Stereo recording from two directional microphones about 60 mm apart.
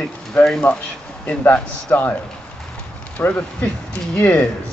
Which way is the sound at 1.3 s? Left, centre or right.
Left.